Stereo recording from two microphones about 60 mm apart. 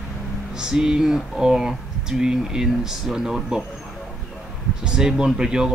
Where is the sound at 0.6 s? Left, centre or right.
Centre.